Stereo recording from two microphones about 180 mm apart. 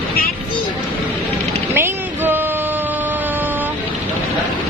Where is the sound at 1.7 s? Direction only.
10° right (ahead or behind).